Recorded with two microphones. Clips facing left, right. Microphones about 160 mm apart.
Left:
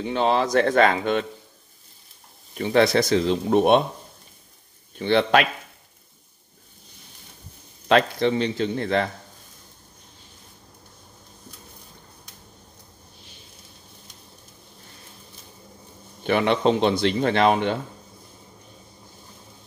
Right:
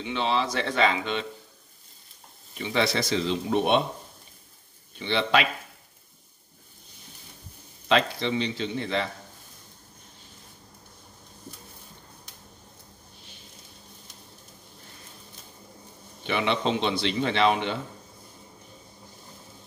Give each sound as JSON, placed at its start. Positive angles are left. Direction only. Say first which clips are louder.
{"t": 0.0, "sound": "speech", "louder": "left 5 dB", "side_deg": 45}
{"t": 2.5, "sound": "speech", "louder": "left 7 dB", "side_deg": 50}
{"t": 4.9, "sound": "speech", "louder": "left 5 dB", "side_deg": 50}
{"t": 7.9, "sound": "speech", "louder": "left 5 dB", "side_deg": 50}
{"t": 16.3, "sound": "speech", "louder": "left 6 dB", "side_deg": 50}